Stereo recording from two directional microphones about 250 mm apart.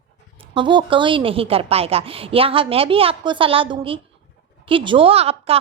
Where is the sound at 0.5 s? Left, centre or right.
Centre.